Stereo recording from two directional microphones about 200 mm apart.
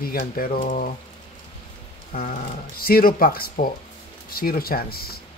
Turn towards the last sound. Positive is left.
turn(degrees=50)  # may be behind; listen again after turning